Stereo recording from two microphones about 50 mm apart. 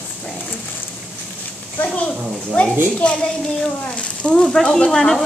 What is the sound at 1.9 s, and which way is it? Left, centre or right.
Speech, left.